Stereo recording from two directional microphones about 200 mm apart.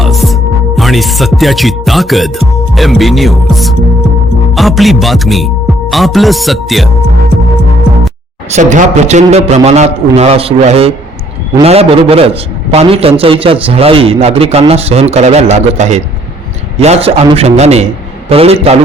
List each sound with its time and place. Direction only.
0.0 s music: centre (ahead or behind)
0.8 s speech: centre (ahead or behind)
8.4 s a man's voice: 35° right (ahead or behind)